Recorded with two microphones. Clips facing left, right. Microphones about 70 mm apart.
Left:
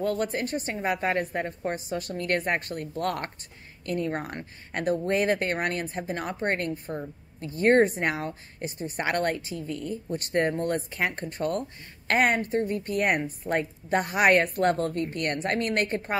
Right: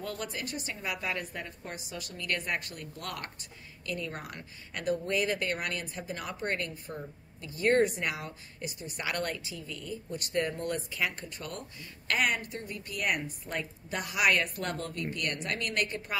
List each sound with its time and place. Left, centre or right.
0.0 s a woman's voice: left